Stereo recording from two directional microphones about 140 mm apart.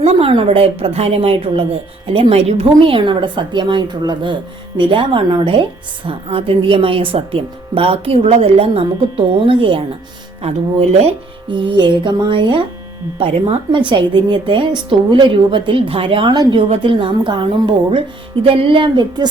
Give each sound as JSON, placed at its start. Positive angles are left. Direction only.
{"t": 0.0, "sound": "a woman's voice", "side_deg": -40}
{"t": 10.4, "sound": "a woman's voice", "side_deg": -50}
{"t": 11.5, "sound": "speech", "side_deg": -35}